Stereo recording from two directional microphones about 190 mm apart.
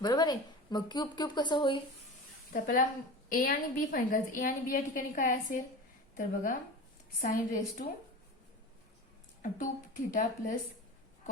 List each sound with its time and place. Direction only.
0.0 s speech: 20° left (ahead or behind)
2.5 s a woman's voice: 45° left (ahead or behind)
9.4 s a woman's voice: 45° left (ahead or behind)